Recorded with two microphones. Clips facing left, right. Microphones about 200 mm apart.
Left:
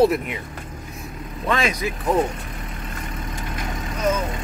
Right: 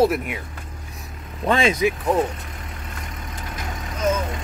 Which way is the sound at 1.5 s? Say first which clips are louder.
Right 4 dB; 25° right (ahead or behind).